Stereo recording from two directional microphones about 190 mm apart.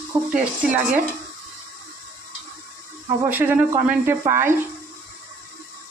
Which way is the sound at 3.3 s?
10° right (ahead or behind).